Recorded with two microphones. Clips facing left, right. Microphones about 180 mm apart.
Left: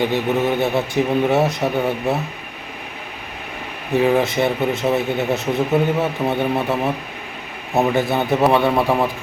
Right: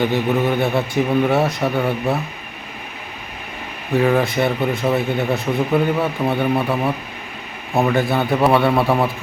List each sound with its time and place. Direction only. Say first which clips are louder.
0.0 s speech: right 1 dB; 20° left (ahead or behind)
4.0 s a man's voice: even; 20° left (ahead or behind)